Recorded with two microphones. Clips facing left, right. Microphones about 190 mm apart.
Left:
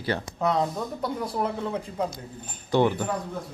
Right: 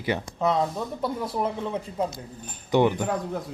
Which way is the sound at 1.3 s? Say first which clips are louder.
Even; 5° right (ahead or behind).